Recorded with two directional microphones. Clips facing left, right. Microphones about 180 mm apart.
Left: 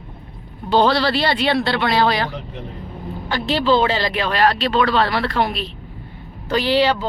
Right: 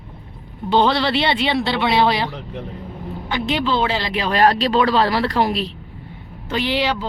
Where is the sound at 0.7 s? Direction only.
20° right (ahead or behind).